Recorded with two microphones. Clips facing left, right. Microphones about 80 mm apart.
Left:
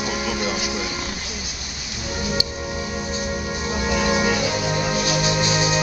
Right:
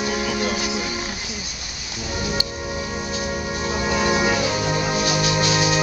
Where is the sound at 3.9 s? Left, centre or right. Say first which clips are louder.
Even; centre.